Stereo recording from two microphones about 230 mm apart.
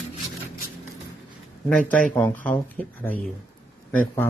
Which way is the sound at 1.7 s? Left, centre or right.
Centre.